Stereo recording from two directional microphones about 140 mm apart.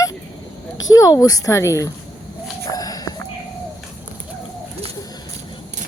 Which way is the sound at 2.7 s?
25° left (ahead or behind).